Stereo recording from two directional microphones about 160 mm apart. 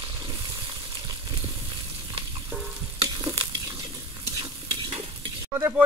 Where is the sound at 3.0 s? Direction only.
25° right (ahead or behind).